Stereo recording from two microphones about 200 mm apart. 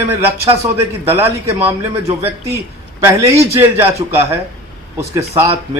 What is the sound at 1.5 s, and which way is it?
Speech, 30° right (ahead or behind).